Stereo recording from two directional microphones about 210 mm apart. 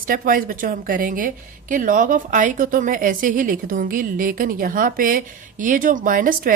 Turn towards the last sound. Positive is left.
turn(degrees=-40)  # may be behind; listen again after turning